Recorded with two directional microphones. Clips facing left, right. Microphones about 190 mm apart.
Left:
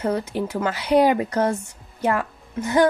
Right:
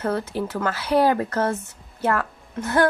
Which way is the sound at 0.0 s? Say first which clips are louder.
Left 1 dB; 15° left (ahead or behind).